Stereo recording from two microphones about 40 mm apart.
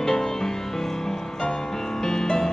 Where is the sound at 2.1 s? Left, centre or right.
Centre.